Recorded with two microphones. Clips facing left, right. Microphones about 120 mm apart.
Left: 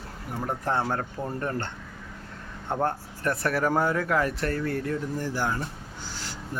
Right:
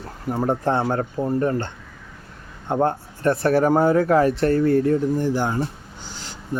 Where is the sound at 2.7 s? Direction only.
25° right (ahead or behind).